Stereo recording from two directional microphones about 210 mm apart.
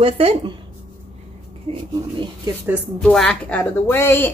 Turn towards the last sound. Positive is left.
turn(degrees=10)  # may be behind; listen again after turning